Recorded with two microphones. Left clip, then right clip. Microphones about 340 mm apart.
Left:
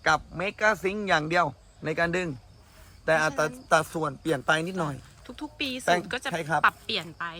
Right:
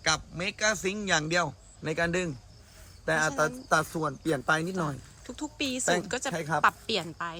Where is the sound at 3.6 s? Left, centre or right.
Centre.